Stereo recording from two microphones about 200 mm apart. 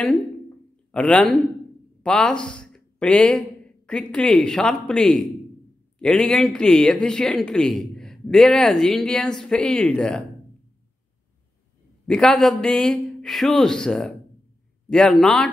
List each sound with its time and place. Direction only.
0.9 s speech: 5° left (ahead or behind)
12.1 s speech: 5° left (ahead or behind)